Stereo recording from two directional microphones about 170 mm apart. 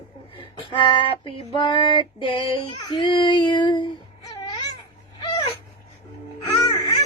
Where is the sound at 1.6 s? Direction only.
30° left (ahead or behind).